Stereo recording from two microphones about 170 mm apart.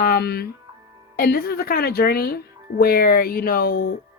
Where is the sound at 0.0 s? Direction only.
65° left (ahead or behind).